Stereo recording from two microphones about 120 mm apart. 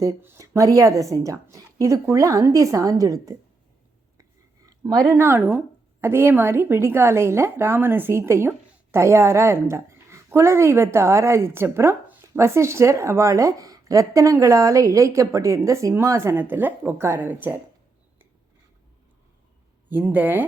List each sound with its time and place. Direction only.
0.0 s a woman's voice: 20° right (ahead or behind)
4.9 s a woman's voice: 30° right (ahead or behind)
19.9 s speech: 15° right (ahead or behind)